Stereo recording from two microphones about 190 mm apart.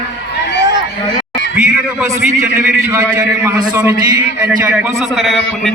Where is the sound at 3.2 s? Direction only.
15° right (ahead or behind).